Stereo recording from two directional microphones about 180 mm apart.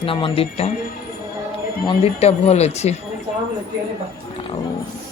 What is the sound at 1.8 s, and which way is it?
Speech, 30° left (ahead or behind).